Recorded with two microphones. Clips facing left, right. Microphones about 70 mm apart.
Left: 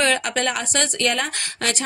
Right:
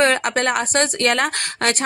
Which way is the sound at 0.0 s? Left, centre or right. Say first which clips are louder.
Right 3 dB; right.